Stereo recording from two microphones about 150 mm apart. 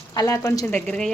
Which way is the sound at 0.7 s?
5° left (ahead or behind).